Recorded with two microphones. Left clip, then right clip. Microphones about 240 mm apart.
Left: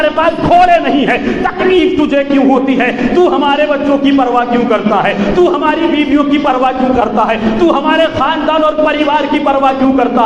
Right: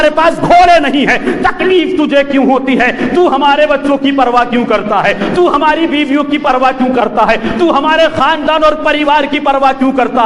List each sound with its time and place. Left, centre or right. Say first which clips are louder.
0.0 s a man's voice: right 2 dB; right